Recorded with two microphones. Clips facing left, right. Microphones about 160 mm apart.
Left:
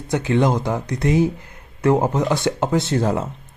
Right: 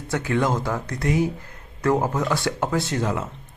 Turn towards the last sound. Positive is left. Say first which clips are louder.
# left 5 dB
turn(degrees=30)  # may be behind; listen again after turning